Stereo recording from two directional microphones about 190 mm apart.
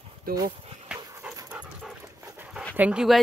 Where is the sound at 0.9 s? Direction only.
20° right (ahead or behind).